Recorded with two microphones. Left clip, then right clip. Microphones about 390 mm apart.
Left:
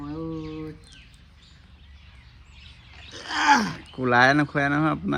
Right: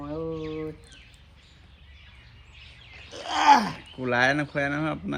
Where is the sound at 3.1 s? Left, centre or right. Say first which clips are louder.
Right 2 dB; centre.